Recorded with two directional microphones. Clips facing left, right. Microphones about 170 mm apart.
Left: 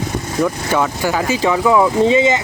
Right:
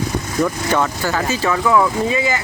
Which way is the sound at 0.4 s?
10° left (ahead or behind).